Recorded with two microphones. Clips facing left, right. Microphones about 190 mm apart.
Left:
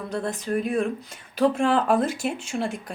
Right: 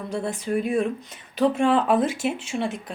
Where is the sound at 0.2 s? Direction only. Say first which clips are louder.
Right 1 dB; 5° right (ahead or behind).